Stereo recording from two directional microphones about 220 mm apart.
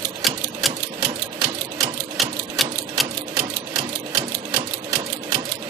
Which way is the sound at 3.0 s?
Centre (ahead or behind).